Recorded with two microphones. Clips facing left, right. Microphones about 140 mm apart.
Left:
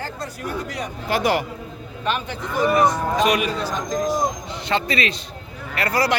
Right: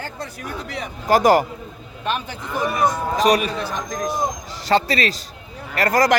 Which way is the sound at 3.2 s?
40° right (ahead or behind).